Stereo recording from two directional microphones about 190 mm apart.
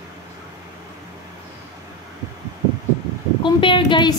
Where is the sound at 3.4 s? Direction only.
25° left (ahead or behind).